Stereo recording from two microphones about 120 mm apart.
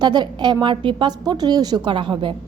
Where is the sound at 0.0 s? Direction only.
35° right (ahead or behind).